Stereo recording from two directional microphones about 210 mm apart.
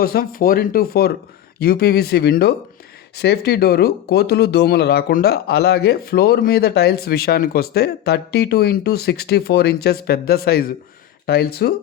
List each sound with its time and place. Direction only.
0.0 s speech: 45° left (ahead or behind)